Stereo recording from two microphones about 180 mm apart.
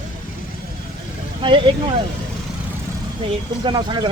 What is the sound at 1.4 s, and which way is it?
Speech, 30° right (ahead or behind).